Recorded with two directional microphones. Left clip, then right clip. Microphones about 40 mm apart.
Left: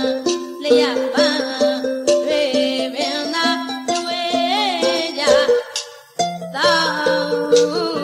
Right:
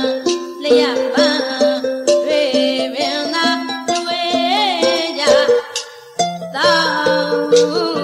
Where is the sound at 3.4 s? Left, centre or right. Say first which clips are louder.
Right 2 dB; right.